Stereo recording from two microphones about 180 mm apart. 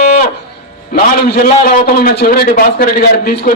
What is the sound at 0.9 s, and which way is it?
A man's voice, 60° left (ahead or behind).